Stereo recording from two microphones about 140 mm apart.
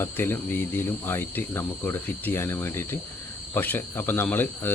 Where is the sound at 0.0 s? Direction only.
15° left (ahead or behind).